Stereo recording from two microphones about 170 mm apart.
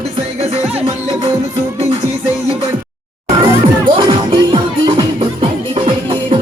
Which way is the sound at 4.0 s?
25° right (ahead or behind).